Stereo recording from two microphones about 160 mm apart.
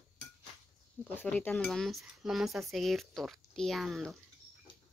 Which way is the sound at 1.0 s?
10° left (ahead or behind).